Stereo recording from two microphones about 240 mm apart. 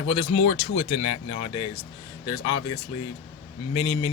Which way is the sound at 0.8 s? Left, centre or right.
Left.